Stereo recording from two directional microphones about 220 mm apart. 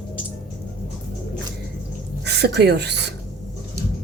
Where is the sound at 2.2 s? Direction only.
50° right (ahead or behind).